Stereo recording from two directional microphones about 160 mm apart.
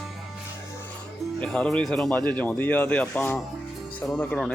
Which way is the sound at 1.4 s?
5° left (ahead or behind).